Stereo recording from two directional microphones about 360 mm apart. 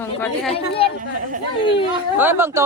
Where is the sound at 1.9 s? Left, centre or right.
Centre.